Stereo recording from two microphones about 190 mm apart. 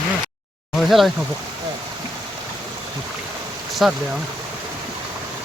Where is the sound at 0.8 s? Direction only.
Centre (ahead or behind).